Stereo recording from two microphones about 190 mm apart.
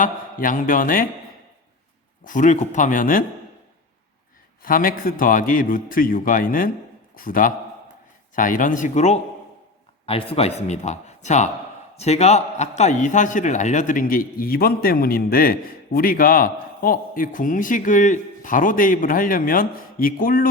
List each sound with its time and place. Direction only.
0.0 s a man's voice: 45° left (ahead or behind)
2.2 s a man's voice: 45° left (ahead or behind)
4.6 s a man's voice: 50° left (ahead or behind)